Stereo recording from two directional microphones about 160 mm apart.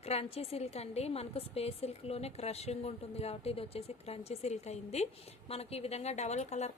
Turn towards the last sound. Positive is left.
turn(degrees=45)  # may be behind; listen again after turning